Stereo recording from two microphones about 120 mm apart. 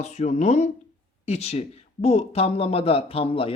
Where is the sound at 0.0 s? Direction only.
75° left (ahead or behind).